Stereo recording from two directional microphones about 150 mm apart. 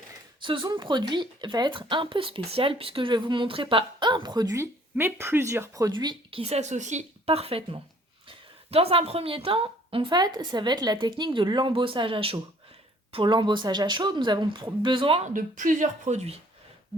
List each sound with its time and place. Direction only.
0.4 s speech: 30° right (ahead or behind)
6.4 s speech: 45° right (ahead or behind)
15.3 s a woman's voice: 60° right (ahead or behind); by 16.4 s 45° right (ahead or behind)